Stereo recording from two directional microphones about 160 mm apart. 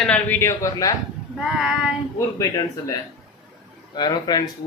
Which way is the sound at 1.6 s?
5° right (ahead or behind).